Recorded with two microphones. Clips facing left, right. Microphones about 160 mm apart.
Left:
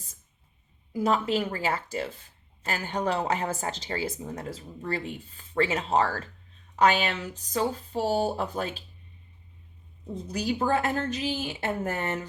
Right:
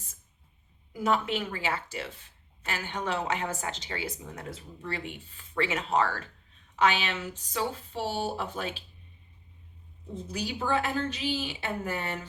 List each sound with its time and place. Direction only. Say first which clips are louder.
0.9 s a woman's voice: left 3 dB; 35° left (ahead or behind)
10.3 s a woman's voice: left 4 dB; 45° left (ahead or behind)